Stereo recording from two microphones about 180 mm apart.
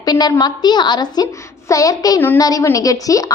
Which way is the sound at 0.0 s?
20° left (ahead or behind).